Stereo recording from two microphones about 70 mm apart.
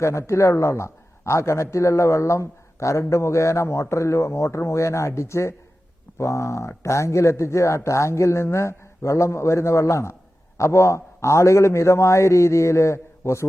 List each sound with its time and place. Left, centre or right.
0.0 s speech: left